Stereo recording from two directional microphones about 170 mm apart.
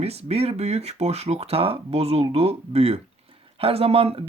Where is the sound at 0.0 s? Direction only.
35° right (ahead or behind).